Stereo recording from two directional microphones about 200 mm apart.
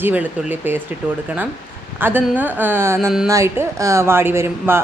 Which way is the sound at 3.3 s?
15° right (ahead or behind).